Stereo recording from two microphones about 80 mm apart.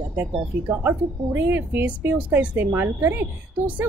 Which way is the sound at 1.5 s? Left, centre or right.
Right.